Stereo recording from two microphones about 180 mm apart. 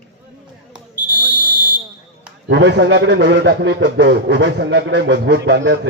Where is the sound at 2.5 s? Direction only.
70° right (ahead or behind).